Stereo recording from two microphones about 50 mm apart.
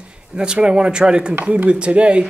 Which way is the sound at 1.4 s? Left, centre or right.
Right.